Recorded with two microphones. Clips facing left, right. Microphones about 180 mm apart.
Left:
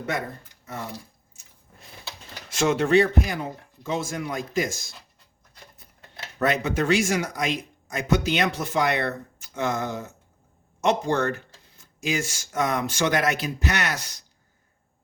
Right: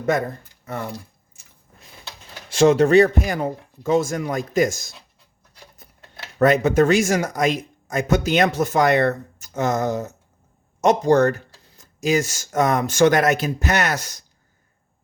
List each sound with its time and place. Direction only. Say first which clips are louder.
0.6 s speech: right 6 dB; 60° right (ahead or behind)
2.5 s speech: right 6 dB; 35° right (ahead or behind)
6.4 s speech: right 8 dB; 45° right (ahead or behind)